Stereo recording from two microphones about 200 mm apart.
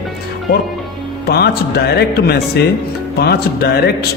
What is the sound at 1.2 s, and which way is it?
Speech, 55° left (ahead or behind).